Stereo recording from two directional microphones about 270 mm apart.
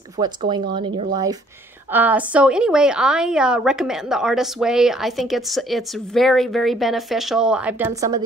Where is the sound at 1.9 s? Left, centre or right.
Centre.